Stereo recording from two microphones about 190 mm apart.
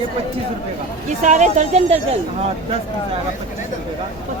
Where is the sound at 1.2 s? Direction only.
40° right (ahead or behind).